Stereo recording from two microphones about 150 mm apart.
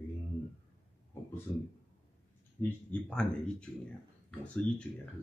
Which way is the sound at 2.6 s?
10° left (ahead or behind).